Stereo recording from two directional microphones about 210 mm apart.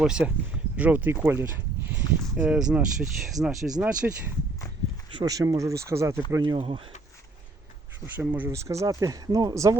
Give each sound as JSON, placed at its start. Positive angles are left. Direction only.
{"t": 0.0, "sound": "speech", "side_deg": -5}
{"t": 5.1, "sound": "speech", "side_deg": -15}
{"t": 8.0, "sound": "speech", "side_deg": -10}